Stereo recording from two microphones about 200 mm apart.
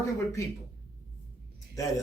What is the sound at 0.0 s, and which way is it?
Speech, 15° left (ahead or behind).